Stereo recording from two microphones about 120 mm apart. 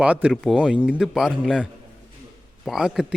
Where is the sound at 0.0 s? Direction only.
10° right (ahead or behind).